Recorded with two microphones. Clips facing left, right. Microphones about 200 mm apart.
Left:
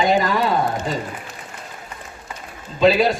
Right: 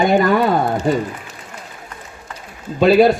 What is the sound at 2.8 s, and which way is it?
Speech, 55° right (ahead or behind).